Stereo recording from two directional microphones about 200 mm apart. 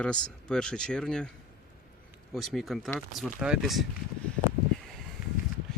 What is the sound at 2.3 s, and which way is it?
Speech, centre (ahead or behind).